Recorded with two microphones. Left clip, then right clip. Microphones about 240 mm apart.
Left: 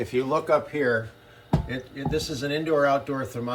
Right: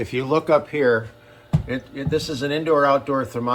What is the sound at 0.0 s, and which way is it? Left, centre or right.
Speech, right.